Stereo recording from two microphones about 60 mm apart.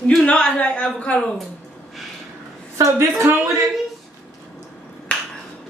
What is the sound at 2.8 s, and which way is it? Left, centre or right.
Female singing, right.